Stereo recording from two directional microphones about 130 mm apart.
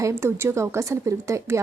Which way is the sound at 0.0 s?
20° right (ahead or behind).